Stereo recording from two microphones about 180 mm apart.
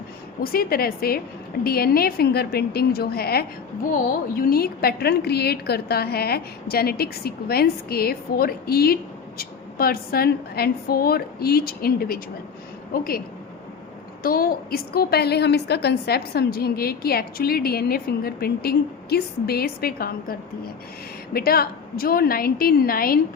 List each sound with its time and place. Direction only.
0.4 s a woman's voice: 55° left (ahead or behind)
21.3 s a woman's voice: 60° left (ahead or behind)